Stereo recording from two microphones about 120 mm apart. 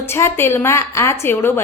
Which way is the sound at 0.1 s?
20° left (ahead or behind).